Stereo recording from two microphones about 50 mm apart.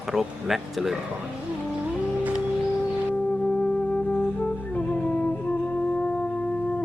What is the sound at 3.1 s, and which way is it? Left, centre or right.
Music, left.